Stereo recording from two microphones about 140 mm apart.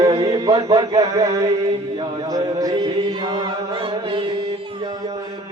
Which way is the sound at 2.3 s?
25° right (ahead or behind).